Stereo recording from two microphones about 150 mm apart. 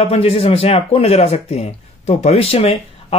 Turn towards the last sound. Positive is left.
turn(degrees=40)  # may be behind; listen again after turning